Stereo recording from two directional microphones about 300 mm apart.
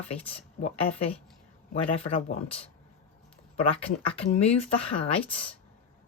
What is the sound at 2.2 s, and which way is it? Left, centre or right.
Speech, centre.